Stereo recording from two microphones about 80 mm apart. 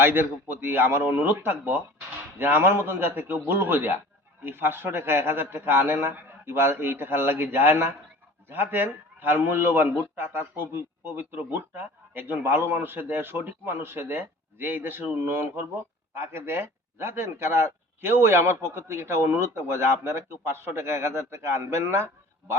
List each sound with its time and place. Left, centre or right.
0.0 s speech: right